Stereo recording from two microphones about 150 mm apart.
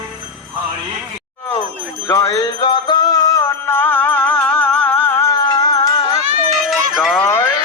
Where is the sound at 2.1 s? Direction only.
25° left (ahead or behind).